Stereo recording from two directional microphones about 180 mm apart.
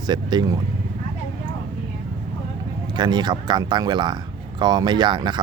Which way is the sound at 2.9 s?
25° right (ahead or behind).